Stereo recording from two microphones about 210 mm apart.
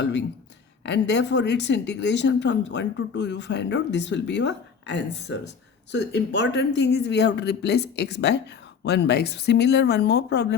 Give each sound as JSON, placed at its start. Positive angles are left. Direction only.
{"t": 0.0, "sound": "speech", "side_deg": 55}